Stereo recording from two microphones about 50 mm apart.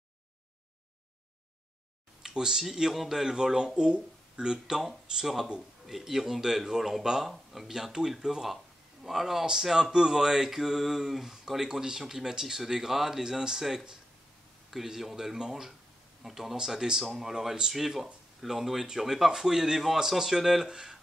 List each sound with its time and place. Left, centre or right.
2.2 s speech: centre